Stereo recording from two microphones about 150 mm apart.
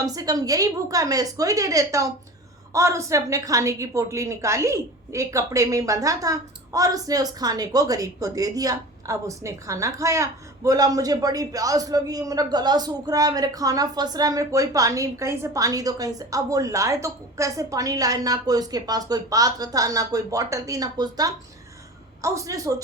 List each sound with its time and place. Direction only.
0.0 s a woman's voice: 25° right (ahead or behind)